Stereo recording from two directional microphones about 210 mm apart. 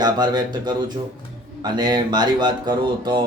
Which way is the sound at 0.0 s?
20° right (ahead or behind).